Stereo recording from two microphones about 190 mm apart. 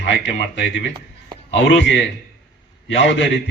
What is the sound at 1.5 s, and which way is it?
A man's voice, 70° left (ahead or behind).